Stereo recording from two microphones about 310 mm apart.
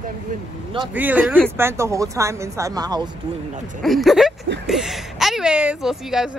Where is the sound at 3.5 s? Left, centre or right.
Right.